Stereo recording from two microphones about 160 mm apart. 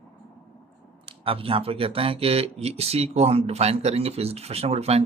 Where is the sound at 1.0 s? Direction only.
35° right (ahead or behind).